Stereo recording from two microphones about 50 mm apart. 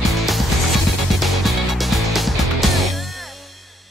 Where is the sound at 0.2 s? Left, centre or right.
Centre.